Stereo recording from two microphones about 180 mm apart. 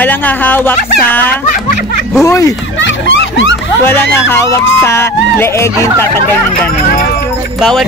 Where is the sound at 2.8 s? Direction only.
90° left.